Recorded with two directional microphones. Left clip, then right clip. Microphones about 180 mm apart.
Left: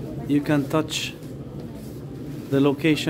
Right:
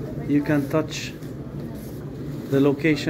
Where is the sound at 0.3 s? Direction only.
20° left (ahead or behind).